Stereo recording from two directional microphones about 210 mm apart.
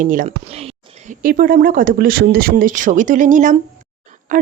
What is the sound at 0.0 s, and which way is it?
Speech, 40° right (ahead or behind).